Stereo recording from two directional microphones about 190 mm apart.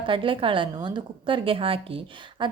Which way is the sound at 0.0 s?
25° right (ahead or behind).